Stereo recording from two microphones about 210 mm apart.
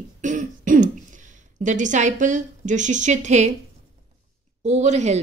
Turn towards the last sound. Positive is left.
turn(degrees=-30)  # may be behind; listen again after turning